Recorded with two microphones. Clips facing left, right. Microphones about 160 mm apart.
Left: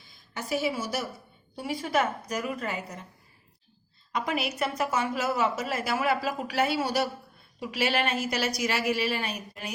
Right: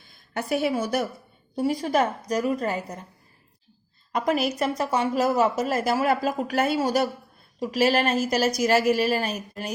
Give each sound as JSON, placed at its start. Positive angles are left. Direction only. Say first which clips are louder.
{"t": 0.0, "sound": "a woman's voice", "louder": "right 7 dB", "side_deg": -55}
{"t": 1.5, "sound": "a woman's voice", "louder": "right 5 dB", "side_deg": -40}
{"t": 4.1, "sound": "a woman's voice", "louder": "right 6 dB", "side_deg": -40}